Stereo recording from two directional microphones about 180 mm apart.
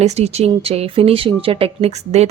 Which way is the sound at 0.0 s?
35° right (ahead or behind).